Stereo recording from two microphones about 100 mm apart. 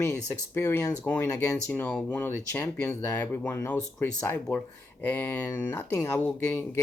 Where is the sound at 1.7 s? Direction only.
10° left (ahead or behind).